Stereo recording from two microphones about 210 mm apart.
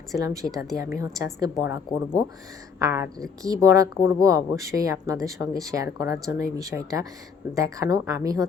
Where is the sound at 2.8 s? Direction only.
15° right (ahead or behind).